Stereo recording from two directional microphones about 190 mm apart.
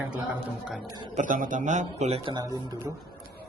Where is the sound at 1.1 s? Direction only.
45° right (ahead or behind).